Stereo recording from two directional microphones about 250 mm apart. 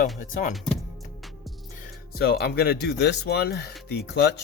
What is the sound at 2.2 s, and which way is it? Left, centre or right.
Speech, left.